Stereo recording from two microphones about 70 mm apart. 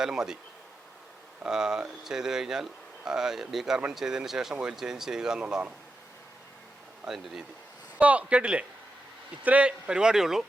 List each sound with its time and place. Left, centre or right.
0.0 s speech: centre
1.5 s speech: centre
7.1 s speech: centre
7.9 s speech: centre